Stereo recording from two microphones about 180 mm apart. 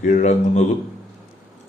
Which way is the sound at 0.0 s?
40° left (ahead or behind).